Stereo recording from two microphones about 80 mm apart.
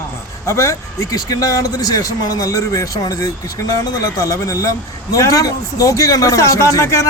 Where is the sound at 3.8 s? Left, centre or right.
Left.